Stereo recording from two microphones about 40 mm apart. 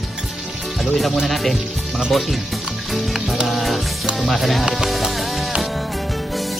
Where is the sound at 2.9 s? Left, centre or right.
Centre.